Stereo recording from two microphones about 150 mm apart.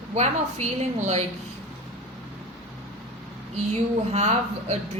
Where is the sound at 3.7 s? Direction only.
45° right (ahead or behind).